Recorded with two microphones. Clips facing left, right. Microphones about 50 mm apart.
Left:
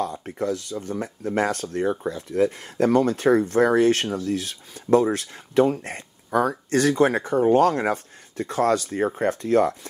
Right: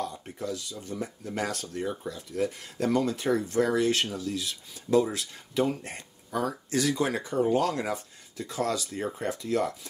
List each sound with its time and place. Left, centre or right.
0.0 s speech: left